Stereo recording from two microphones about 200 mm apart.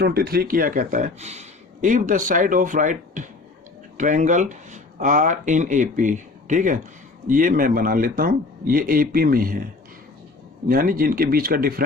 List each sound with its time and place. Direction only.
0.0 s a man's voice: 50° right (ahead or behind)
10.7 s a man's voice: 45° right (ahead or behind)